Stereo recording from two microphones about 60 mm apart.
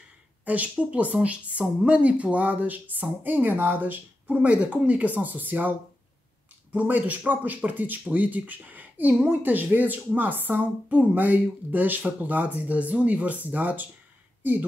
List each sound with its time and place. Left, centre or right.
0.5 s speech: right